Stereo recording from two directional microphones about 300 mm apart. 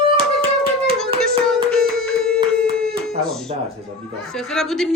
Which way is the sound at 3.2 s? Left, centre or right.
Centre.